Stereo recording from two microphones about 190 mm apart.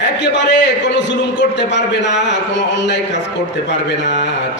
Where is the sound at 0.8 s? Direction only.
70° left (ahead or behind).